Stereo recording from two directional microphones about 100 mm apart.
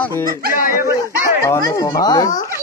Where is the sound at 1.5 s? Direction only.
30° left (ahead or behind).